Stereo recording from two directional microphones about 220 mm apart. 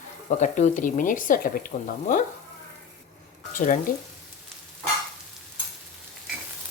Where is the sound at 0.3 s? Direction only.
35° left (ahead or behind).